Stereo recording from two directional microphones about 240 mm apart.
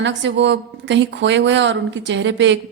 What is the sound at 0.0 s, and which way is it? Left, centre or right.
A woman's voice, right.